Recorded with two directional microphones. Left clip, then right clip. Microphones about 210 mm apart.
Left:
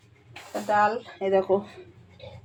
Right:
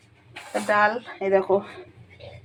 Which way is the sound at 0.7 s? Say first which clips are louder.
Right 2 dB; 20° right (ahead or behind).